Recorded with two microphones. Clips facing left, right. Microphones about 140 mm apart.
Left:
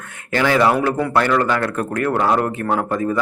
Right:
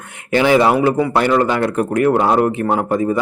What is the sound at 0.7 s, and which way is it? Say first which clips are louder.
Speech: right 3 dB; 10° right (ahead or behind).